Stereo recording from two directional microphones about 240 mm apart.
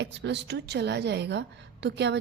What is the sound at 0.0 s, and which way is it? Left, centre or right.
A woman's voice, right.